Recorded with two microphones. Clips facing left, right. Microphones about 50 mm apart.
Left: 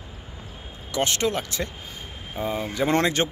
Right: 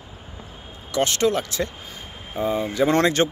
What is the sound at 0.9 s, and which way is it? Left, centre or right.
Speech, left.